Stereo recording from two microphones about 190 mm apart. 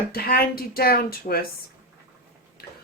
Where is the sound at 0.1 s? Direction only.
50° left (ahead or behind).